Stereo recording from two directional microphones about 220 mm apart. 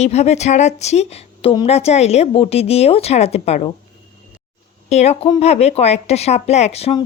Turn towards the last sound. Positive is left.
turn(degrees=25)  # may be behind; listen again after turning